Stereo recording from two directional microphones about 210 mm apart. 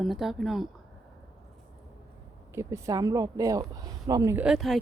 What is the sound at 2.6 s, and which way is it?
Speech, 15° right (ahead or behind).